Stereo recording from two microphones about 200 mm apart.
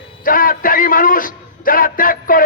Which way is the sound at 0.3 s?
45° left (ahead or behind).